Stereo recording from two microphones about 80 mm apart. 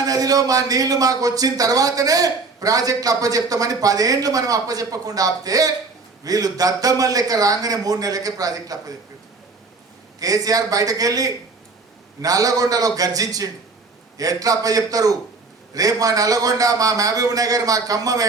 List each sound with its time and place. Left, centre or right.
0.0 s a man's voice: right
10.2 s a man's voice: right